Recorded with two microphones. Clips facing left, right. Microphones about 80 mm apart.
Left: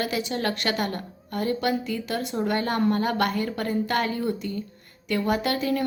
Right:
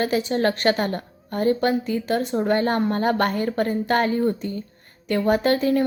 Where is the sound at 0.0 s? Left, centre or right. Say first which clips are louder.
Right 6 dB; right.